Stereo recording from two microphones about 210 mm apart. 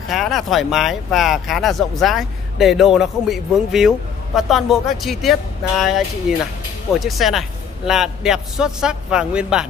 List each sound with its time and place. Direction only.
0.1 s speech: centre (ahead or behind)